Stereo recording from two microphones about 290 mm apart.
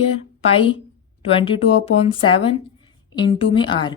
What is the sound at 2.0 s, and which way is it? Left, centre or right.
A woman's voice, centre.